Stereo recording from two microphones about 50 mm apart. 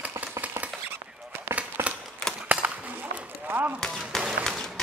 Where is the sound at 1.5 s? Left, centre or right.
Right.